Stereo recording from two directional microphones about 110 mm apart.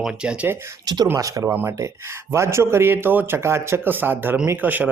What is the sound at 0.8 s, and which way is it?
Speech, 35° right (ahead or behind).